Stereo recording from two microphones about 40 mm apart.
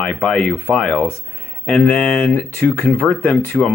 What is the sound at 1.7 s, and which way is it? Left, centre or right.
Speech, left.